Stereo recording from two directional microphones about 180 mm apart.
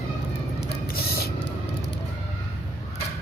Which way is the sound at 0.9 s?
60° left (ahead or behind).